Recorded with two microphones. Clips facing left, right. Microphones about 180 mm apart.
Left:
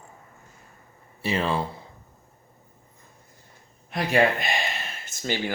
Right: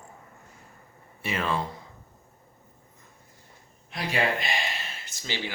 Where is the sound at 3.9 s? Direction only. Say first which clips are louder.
Left 6 dB; 50° left (ahead or behind).